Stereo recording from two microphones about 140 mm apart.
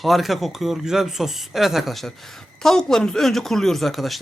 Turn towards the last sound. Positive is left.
turn(degrees=0)  # may be behind; listen again after turning